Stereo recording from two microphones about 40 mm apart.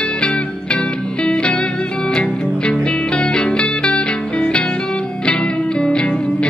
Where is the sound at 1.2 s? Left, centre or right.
Left.